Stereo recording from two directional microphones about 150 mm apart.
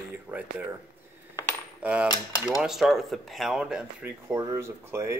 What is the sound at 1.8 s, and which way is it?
Speech, 5° right (ahead or behind).